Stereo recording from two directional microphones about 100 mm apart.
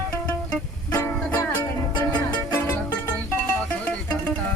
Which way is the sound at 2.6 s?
25° left (ahead or behind).